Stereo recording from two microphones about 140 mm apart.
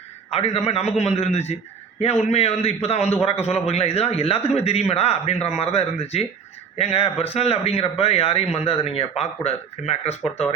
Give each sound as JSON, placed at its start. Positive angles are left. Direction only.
{"t": 0.3, "sound": "a man's voice", "side_deg": 45}